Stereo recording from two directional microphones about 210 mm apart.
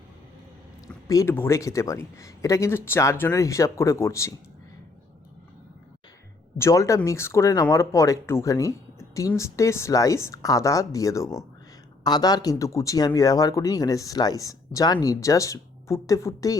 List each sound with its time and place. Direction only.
1.0 s speech: 15° left (ahead or behind)
6.6 s speech: 15° left (ahead or behind)